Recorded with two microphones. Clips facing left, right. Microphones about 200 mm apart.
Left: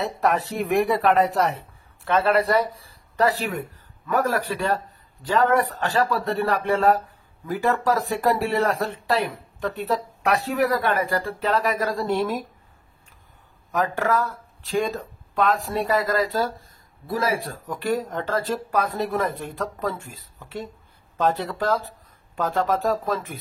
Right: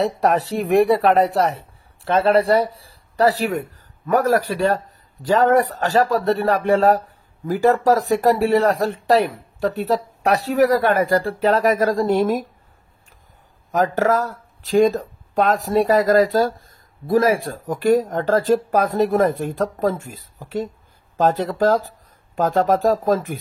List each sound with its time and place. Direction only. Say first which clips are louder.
0.2 s speech: right 4 dB; 35° right (ahead or behind)
13.7 s speech: right 5 dB; 40° right (ahead or behind)